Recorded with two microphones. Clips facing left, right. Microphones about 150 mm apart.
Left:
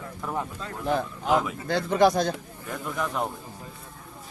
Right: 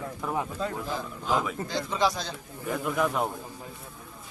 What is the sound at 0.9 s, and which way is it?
Speech, 60° left (ahead or behind).